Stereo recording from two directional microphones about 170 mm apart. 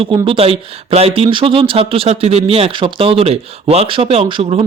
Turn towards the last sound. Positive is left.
turn(degrees=-35)  # may be behind; listen again after turning